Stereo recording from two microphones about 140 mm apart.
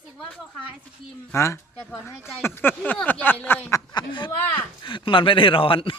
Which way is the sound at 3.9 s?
35° left (ahead or behind).